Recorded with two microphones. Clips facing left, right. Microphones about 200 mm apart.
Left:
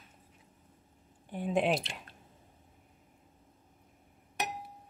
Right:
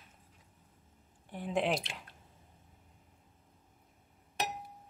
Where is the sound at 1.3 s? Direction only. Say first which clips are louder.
Left 3 dB; 15° left (ahead or behind).